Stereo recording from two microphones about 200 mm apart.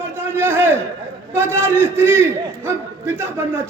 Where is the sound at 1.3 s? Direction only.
10° right (ahead or behind).